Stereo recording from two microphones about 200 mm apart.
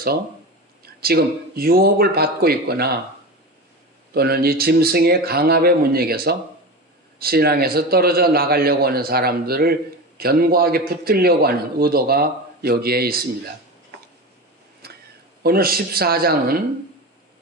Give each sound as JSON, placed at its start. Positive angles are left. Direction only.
{"t": 1.0, "sound": "a man's voice", "side_deg": -50}
{"t": 4.1, "sound": "a man's voice", "side_deg": -50}
{"t": 14.8, "sound": "a sound", "side_deg": -50}
{"t": 15.4, "sound": "a man's voice", "side_deg": -50}